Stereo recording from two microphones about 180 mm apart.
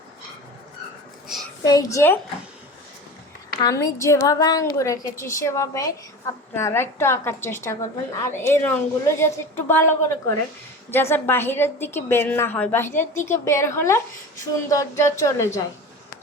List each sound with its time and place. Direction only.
1.6 s a woman's voice: 20° left (ahead or behind)
3.6 s a woman's voice: 20° left (ahead or behind)